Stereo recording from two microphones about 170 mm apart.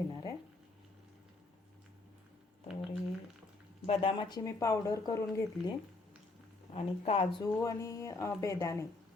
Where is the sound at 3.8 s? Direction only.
35° left (ahead or behind).